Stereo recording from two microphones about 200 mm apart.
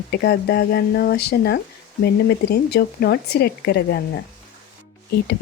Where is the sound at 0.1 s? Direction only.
55° left (ahead or behind).